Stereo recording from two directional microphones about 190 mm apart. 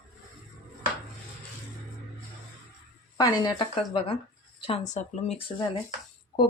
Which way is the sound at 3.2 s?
20° left (ahead or behind).